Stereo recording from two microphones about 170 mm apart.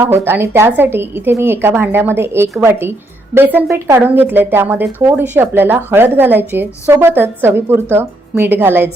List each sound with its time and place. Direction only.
0.0 s speech: 15° right (ahead or behind)